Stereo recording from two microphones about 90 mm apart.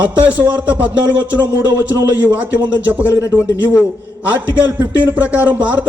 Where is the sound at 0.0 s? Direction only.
15° right (ahead or behind).